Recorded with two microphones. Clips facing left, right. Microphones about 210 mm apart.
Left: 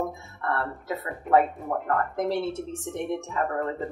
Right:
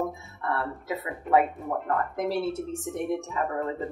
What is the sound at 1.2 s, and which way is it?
Speech, centre (ahead or behind).